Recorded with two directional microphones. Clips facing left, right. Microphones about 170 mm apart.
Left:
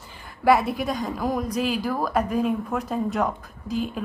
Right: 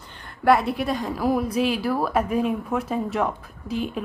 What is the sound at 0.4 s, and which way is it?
Speech, centre (ahead or behind).